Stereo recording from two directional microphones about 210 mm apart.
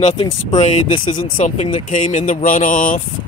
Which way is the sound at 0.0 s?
30° left (ahead or behind).